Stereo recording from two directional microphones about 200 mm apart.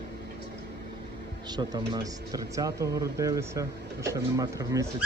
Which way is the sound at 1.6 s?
20° right (ahead or behind).